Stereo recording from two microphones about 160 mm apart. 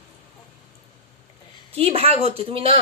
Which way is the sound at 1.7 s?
40° right (ahead or behind).